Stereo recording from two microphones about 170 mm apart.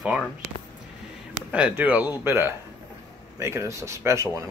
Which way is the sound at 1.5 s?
10° right (ahead or behind).